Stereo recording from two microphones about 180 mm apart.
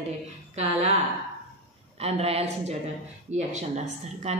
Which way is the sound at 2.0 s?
35° right (ahead or behind).